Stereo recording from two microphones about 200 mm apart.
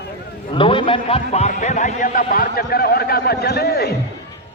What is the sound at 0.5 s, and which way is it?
A man's voice, 25° left (ahead or behind).